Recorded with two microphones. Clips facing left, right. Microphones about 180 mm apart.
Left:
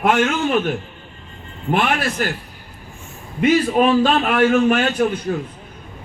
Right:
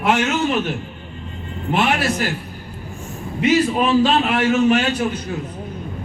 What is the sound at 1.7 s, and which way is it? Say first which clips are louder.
Speech: even; 50° left (ahead or behind).